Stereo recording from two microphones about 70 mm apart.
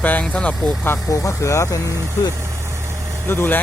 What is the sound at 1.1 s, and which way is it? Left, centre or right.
Speech, left.